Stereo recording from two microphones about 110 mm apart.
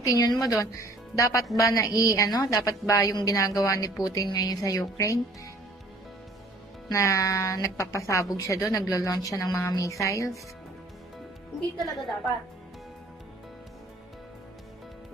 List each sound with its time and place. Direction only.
0.0 s a woman's voice: 35° left (ahead or behind)
6.9 s a woman's voice: 25° left (ahead or behind)